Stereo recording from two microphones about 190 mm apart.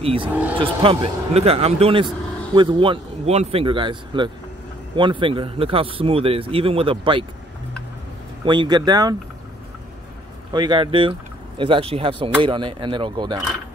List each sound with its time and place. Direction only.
0.0 s speech: 30° right (ahead or behind)
0.3 s speech: 10° right (ahead or behind)
0.6 s speech: 30° right (ahead or behind)
8.5 s speech: 25° right (ahead or behind)
10.5 s speech: 25° right (ahead or behind)